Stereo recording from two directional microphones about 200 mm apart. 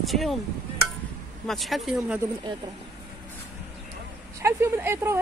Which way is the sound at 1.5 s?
Centre (ahead or behind).